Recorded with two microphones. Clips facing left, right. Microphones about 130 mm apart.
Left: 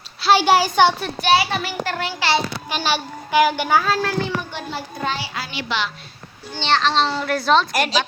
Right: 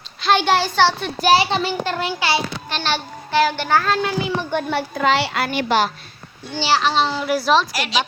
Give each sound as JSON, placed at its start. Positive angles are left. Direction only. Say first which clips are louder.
{"t": 0.2, "sound": "a child's voice", "louder": "left 2 dB", "side_deg": 5}
{"t": 1.2, "sound": "a child's voice", "louder": "right 3 dB", "side_deg": -30}
{"t": 2.6, "sound": "a child's voice", "louder": "left 1 dB", "side_deg": 10}
{"t": 4.5, "sound": "a child's voice", "louder": "right 8 dB", "side_deg": -75}
{"t": 6.6, "sound": "a child's voice", "louder": "right 1 dB", "side_deg": -5}
{"t": 7.7, "sound": "a woman's voice", "louder": "left 5 dB", "side_deg": 50}